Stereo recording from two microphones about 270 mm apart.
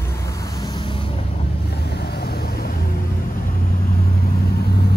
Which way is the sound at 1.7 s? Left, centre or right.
Left.